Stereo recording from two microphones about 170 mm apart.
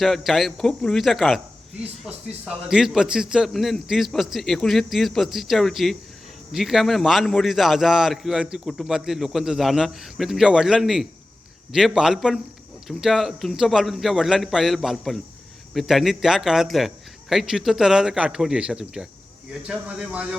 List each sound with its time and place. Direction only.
0.0 s a man's voice: centre (ahead or behind)